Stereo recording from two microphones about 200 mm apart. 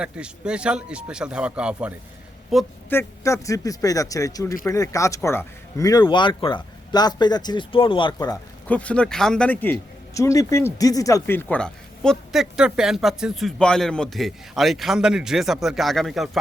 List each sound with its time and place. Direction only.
0.0 s speech: 5° right (ahead or behind)
2.9 s a man's voice: 15° left (ahead or behind)
8.6 s speech: 5° left (ahead or behind)